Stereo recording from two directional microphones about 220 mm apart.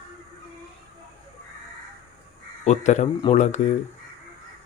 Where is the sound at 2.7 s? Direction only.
30° left (ahead or behind).